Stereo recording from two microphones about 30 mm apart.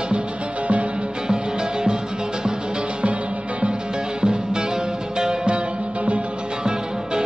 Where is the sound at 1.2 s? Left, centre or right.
Right.